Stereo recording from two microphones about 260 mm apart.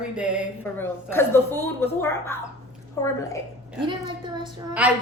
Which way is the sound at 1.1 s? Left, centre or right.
Centre.